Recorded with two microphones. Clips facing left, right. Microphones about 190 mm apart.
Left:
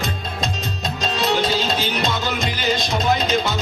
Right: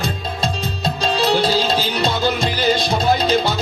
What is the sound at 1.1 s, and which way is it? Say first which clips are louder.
Music: right 3 dB; 35° right (ahead or behind).